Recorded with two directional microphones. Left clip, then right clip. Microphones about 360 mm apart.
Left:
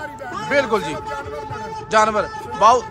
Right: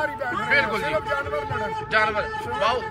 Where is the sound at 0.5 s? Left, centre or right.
Centre.